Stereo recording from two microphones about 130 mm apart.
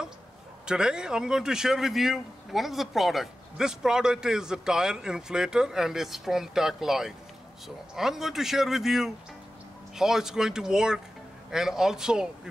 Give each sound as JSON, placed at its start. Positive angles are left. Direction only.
{"t": 0.7, "sound": "a man's voice", "side_deg": -5}